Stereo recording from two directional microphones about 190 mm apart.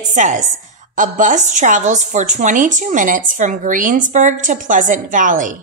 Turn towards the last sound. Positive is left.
turn(degrees=-45)  # may be behind; listen again after turning